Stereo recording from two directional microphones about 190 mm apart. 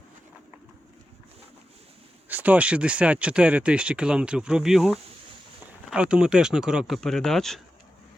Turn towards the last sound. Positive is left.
turn(degrees=0)  # may be behind; listen again after turning